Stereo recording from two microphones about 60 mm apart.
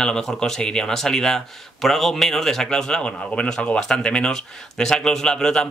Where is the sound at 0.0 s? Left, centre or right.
Centre.